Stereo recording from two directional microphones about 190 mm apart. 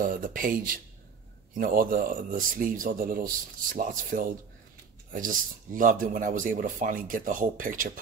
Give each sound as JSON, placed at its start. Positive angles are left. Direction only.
{"t": 0.0, "sound": "speech", "side_deg": -45}